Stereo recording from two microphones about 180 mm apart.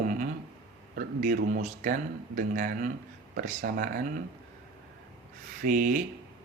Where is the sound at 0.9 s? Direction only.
50° right (ahead or behind).